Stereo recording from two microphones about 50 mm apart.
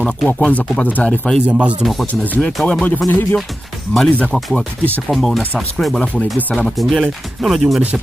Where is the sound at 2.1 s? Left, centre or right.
Left.